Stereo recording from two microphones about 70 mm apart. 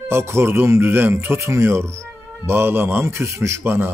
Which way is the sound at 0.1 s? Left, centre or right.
Right.